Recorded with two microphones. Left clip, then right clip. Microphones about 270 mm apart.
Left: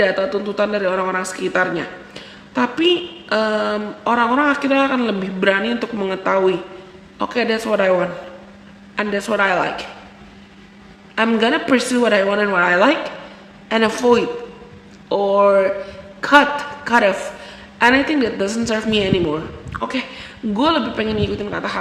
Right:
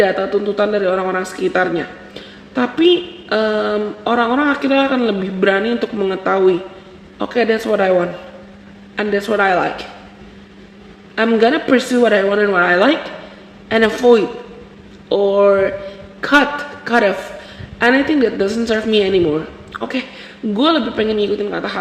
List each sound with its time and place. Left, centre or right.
0.0 s a man's voice: centre
11.1 s a man's voice: centre